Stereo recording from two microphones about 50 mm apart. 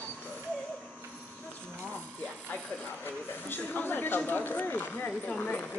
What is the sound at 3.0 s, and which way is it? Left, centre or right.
Speech, left.